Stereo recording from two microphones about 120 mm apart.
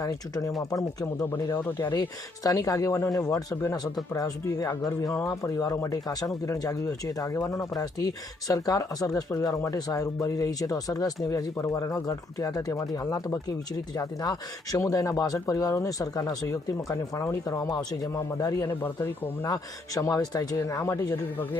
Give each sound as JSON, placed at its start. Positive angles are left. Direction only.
{"t": 0.0, "sound": "speech", "side_deg": 30}
{"t": 1.5, "sound": "speech", "side_deg": 15}
{"t": 1.9, "sound": "speech", "side_deg": 30}
{"t": 18.7, "sound": "speech", "side_deg": 20}
{"t": 20.8, "sound": "speech", "side_deg": 20}